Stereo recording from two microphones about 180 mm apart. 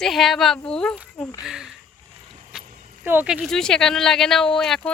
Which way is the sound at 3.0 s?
10° right (ahead or behind).